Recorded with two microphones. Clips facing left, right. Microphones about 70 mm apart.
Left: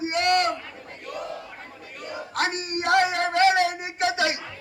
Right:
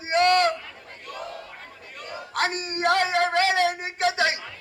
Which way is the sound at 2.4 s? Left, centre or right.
Right.